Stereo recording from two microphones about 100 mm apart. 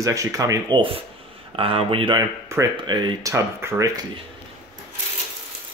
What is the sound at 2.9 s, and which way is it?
Speech, 50° right (ahead or behind).